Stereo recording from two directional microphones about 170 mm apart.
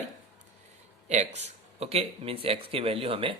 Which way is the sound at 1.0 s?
40° right (ahead or behind).